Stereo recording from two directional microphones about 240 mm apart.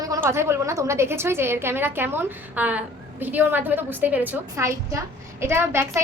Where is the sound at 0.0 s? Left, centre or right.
Centre.